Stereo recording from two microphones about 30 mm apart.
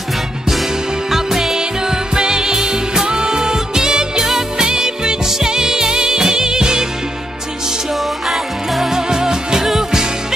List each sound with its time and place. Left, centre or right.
1.1 s music: centre
1.6 s music: right
8.3 s music: centre
8.9 s music: right